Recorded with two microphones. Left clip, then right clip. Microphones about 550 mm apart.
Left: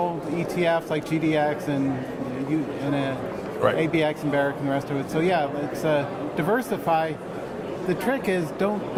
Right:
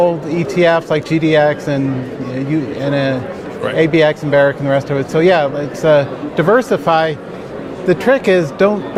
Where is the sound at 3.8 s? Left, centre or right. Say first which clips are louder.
Right 12 dB; right.